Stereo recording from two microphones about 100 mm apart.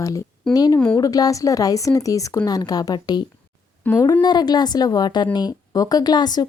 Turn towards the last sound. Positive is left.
turn(degrees=45)  # may be behind; listen again after turning